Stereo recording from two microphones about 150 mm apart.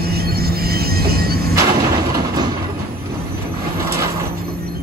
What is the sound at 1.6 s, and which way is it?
Artillery fire, 25° right (ahead or behind).